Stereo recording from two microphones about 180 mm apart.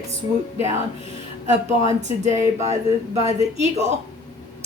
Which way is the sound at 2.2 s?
40° right (ahead or behind).